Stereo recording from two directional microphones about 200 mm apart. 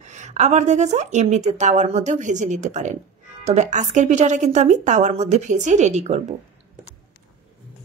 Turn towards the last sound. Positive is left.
turn(degrees=-35)  # may be behind; listen again after turning